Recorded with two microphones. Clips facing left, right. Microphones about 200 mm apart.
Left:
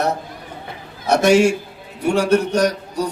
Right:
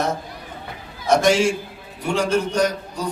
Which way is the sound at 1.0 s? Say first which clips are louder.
Left 3 dB; 65° left (ahead or behind).